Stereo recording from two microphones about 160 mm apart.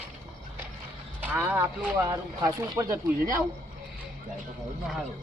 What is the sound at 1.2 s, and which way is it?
Speech, 15° right (ahead or behind).